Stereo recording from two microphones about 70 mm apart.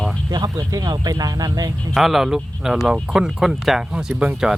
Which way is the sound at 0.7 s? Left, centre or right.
Right.